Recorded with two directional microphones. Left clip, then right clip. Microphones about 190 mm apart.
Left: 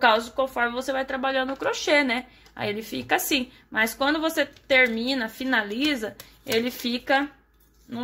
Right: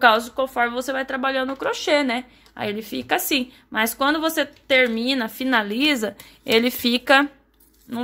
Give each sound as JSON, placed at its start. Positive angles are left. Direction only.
{"t": 0.0, "sound": "speech", "side_deg": -20}